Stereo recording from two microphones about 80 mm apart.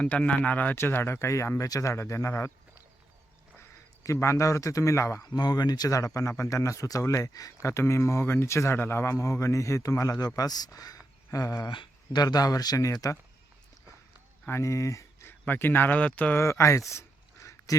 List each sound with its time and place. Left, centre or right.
0.0 s a man's voice: centre; by 5.2 s left
5.2 s a man's voice: left
11.7 s speech: left
14.4 s speech: left
15.3 s speech: left
16.4 s a sound: left